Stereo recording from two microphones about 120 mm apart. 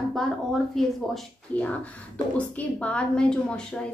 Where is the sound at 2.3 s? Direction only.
10° left (ahead or behind).